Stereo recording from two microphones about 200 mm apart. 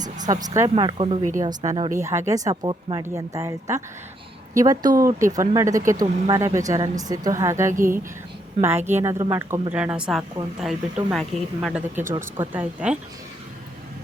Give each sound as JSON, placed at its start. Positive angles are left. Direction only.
{"t": 0.0, "sound": "a sound", "side_deg": -20}
{"t": 0.4, "sound": "a woman's voice", "side_deg": -15}
{"t": 7.7, "sound": "speech", "side_deg": -40}
{"t": 9.0, "sound": "a woman's voice", "side_deg": -10}